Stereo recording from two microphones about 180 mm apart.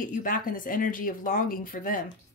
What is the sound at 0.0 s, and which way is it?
Speech, 50° left (ahead or behind).